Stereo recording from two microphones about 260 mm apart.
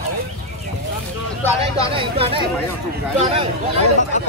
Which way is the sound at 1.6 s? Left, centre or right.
Right.